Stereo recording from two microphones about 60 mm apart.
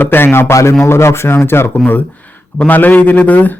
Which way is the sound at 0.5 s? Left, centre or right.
Left.